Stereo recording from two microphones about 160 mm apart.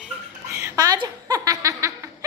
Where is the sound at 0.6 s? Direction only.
20° right (ahead or behind).